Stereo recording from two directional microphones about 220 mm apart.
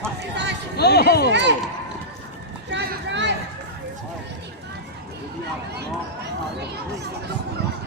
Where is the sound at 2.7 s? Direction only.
50° right (ahead or behind).